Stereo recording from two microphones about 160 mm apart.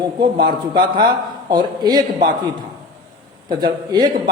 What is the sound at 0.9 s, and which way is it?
A man's voice, 30° right (ahead or behind).